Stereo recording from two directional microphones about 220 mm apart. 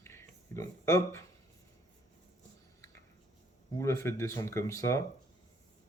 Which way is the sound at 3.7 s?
10° left (ahead or behind).